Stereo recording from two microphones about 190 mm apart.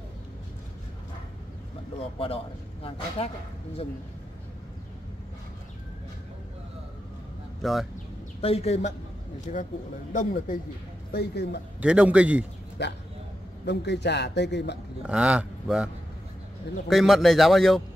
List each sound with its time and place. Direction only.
2.1 s a man's voice: 30° left (ahead or behind)
7.6 s a man's voice: centre (ahead or behind)
8.4 s speech: 30° left (ahead or behind)
11.1 s speech: 60° left (ahead or behind)
11.8 s speech: 5° right (ahead or behind)
12.8 s speech: 65° left (ahead or behind)
15.0 s speech: 5° right (ahead or behind)
16.9 s a man's voice: centre (ahead or behind)